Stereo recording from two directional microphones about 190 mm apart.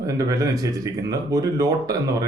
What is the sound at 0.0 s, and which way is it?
Speech, 20° right (ahead or behind).